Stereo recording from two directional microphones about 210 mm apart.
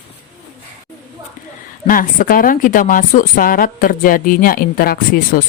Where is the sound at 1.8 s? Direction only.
40° left (ahead or behind).